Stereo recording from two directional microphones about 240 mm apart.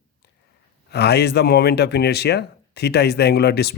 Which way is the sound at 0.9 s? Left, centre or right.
Left.